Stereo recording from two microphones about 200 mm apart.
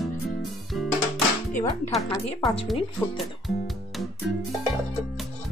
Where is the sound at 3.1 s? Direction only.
Centre (ahead or behind).